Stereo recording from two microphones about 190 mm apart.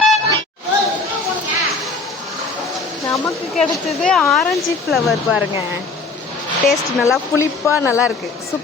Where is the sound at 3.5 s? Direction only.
Centre (ahead or behind).